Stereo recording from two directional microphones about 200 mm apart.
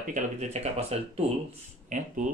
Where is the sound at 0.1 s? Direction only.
35° right (ahead or behind).